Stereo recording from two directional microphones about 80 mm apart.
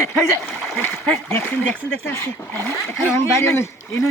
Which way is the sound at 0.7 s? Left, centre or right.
Left.